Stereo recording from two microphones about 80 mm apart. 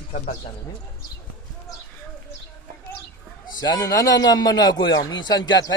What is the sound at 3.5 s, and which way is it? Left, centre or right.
A man's voice, left.